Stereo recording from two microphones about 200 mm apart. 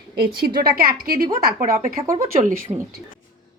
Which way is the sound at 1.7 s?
15° right (ahead or behind).